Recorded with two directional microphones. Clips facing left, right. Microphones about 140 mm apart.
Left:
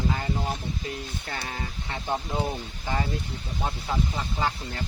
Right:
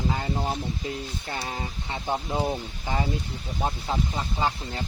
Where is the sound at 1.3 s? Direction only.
25° right (ahead or behind).